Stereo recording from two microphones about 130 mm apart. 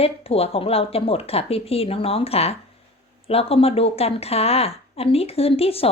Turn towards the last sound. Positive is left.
turn(degrees=50)  # may be behind; listen again after turning